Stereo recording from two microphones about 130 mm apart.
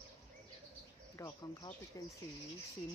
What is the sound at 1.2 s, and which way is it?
Speech, 25° left (ahead or behind).